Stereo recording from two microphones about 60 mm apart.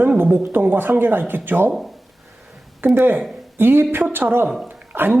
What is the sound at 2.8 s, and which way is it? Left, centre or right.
A woman's voice, right.